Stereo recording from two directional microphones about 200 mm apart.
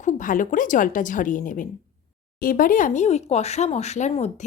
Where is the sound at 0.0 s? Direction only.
40° left (ahead or behind).